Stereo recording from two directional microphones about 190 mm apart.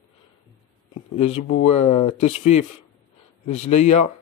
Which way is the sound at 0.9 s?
35° left (ahead or behind).